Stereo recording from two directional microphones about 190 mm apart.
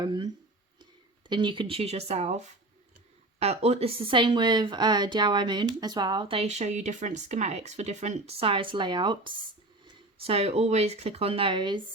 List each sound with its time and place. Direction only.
0.0 s a woman's voice: 25° right (ahead or behind)
1.3 s a woman's voice: 25° right (ahead or behind)